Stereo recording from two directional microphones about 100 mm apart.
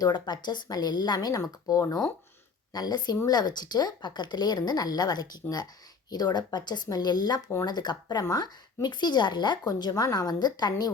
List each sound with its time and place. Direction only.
0.0 s speech: 45° left (ahead or behind)